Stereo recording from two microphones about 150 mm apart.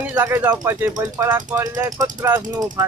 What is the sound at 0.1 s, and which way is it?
Speech, 10° right (ahead or behind).